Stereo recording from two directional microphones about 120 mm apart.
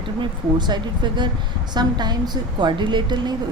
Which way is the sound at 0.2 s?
40° right (ahead or behind).